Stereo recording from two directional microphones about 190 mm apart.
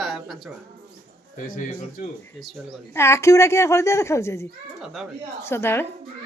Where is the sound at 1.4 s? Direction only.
45° left (ahead or behind).